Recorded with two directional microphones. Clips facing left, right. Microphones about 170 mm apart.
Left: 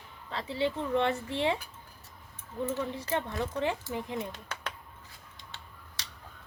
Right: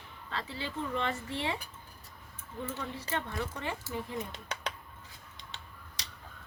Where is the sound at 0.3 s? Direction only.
20° left (ahead or behind).